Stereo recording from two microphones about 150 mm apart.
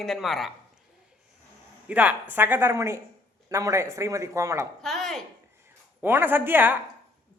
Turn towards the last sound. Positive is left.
turn(degrees=-15)  # may be behind; listen again after turning